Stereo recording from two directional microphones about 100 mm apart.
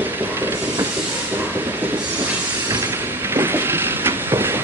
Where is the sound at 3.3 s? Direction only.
25° right (ahead or behind).